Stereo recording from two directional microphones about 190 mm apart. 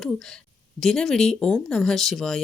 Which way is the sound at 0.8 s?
Centre (ahead or behind).